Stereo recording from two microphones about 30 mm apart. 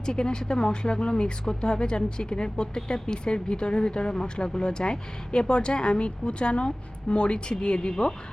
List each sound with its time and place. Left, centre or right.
0.0 s speech: left